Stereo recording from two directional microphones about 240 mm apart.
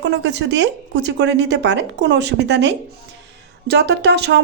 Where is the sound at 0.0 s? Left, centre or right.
Right.